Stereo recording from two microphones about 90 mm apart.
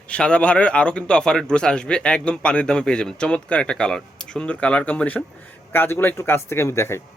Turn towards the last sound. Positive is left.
turn(degrees=30)  # may be behind; listen again after turning